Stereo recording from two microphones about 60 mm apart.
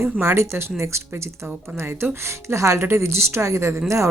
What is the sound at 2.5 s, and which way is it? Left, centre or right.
A woman's voice, right.